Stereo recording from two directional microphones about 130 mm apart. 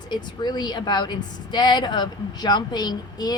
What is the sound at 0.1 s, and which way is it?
Speech, 35° left (ahead or behind).